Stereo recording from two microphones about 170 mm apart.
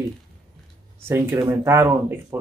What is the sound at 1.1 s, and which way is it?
Speech, 15° right (ahead or behind).